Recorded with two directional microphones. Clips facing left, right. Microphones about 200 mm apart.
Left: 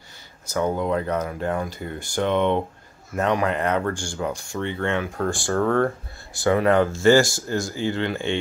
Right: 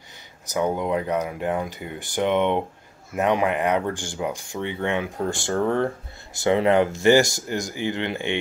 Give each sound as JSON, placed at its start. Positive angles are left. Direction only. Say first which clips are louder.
{"t": 0.5, "sound": "speech", "louder": "even", "side_deg": -15}